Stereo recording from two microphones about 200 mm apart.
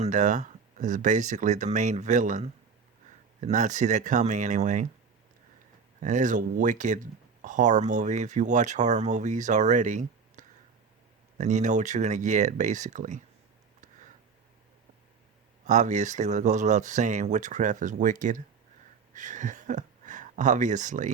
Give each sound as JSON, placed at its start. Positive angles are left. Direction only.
{"t": 0.0, "sound": "speech", "side_deg": -40}
{"t": 6.0, "sound": "speech", "side_deg": -40}
{"t": 15.6, "sound": "speech", "side_deg": -35}